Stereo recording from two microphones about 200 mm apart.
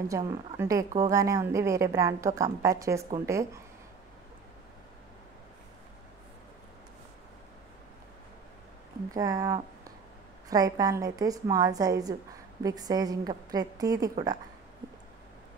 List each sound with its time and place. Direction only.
0.1 s a woman's voice: 15° right (ahead or behind)
9.1 s a woman's voice: 15° right (ahead or behind)